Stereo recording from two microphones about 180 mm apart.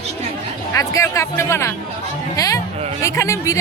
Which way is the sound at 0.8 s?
15° left (ahead or behind).